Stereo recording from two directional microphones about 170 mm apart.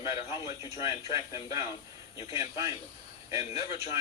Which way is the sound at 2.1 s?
35° left (ahead or behind).